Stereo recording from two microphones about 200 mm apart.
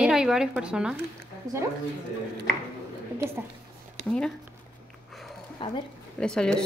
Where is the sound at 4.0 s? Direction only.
35° right (ahead or behind).